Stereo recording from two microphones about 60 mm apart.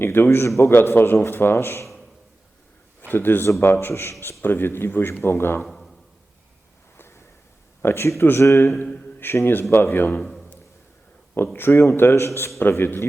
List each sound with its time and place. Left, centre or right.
0.0 s a man's voice: left
0.7 s a man's voice: left
3.1 s a man's voice: left
5.6 s a sound: centre
7.8 s speech: left
8.4 s speech: left
9.2 s a man's voice: left
10.1 s a man's voice: centre
11.5 s a man's voice: left
12.5 s a man's voice: left